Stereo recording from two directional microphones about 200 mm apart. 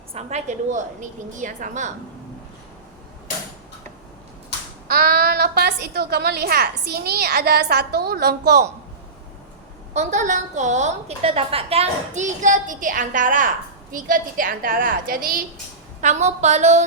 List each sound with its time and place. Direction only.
0.1 s a woman's voice: 35° right (ahead or behind)
4.9 s a woman's voice: 50° right (ahead or behind)
9.9 s a woman's voice: 35° right (ahead or behind)